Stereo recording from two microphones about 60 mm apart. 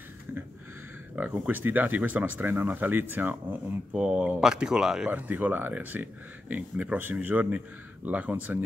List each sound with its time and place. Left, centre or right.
1.1 s speech: right
3.9 s speech: centre
5.1 s speech: right